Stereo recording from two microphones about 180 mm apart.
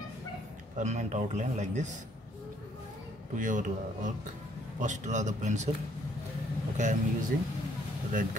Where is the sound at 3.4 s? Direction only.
45° right (ahead or behind).